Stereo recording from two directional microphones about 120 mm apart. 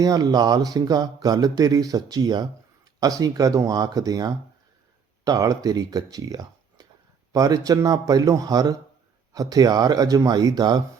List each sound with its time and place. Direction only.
0.0 s speech: 30° right (ahead or behind)